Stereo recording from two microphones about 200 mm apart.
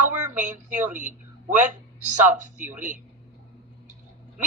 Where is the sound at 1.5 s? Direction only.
40° right (ahead or behind).